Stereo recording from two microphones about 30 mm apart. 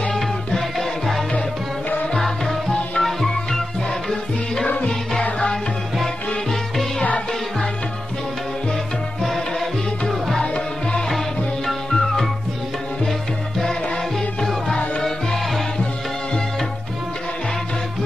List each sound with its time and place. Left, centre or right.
0.1 s music: centre
0.7 s music: centre
10.4 s music: left